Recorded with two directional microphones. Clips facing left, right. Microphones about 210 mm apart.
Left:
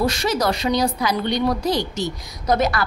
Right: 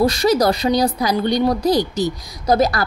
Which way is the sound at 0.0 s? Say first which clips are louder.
Right 5 dB; 35° right (ahead or behind).